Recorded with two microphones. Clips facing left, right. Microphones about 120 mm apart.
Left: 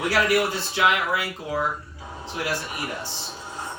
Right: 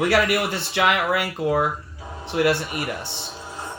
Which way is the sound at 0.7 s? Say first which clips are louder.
Right 3 dB; 65° right (ahead or behind).